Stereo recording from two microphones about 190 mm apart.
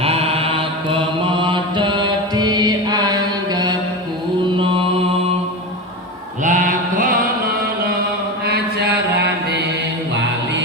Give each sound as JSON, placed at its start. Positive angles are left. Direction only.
{"t": 0.0, "sound": "chant", "side_deg": -30}
{"t": 4.5, "sound": "mantra", "side_deg": -30}
{"t": 6.4, "sound": "mantra", "side_deg": -40}
{"t": 8.4, "sound": "mantra", "side_deg": -55}